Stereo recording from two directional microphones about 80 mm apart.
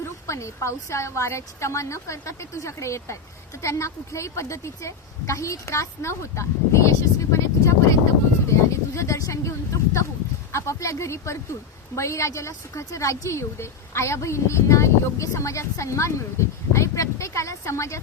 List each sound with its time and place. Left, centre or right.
0.0 s a woman's voice: left
10.5 s a woman's voice: left